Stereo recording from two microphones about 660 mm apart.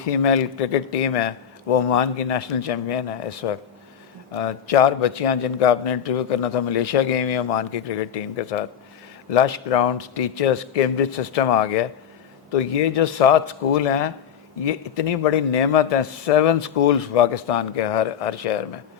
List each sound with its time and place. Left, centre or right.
0.2 s a man's voice: left
9.3 s a man's voice: left